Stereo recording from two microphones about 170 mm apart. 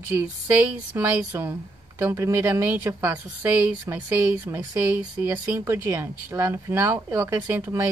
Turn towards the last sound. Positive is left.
turn(degrees=-15)  # may be behind; listen again after turning